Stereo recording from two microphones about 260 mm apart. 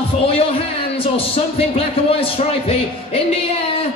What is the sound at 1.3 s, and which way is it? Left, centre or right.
A man's voice, left.